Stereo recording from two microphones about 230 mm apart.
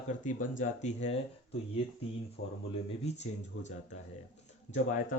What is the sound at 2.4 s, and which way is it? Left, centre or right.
Speech, left.